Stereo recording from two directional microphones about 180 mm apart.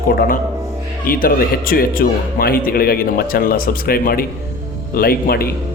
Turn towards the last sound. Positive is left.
turn(degrees=55)  # may be behind; listen again after turning